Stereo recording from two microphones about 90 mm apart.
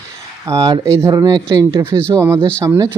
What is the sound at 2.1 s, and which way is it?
Speech, 30° right (ahead or behind).